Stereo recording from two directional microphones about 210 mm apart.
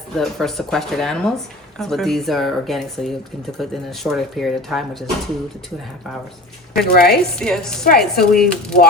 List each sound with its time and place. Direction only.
0.2 s speech: centre (ahead or behind)
6.8 s speech: 45° left (ahead or behind)
7.3 s speech: 5° left (ahead or behind)
7.9 s speech: 45° left (ahead or behind)